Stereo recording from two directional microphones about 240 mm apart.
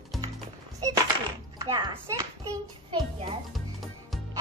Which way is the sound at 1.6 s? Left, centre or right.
Centre.